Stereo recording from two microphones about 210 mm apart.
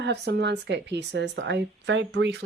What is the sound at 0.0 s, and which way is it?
Speech, 55° right (ahead or behind).